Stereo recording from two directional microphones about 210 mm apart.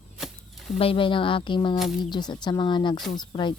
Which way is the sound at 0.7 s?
25° left (ahead or behind).